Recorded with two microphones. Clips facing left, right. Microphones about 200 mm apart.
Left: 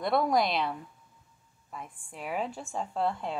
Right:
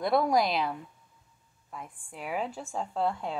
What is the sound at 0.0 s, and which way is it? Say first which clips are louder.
A woman's voice: right 1 dB; centre (ahead or behind).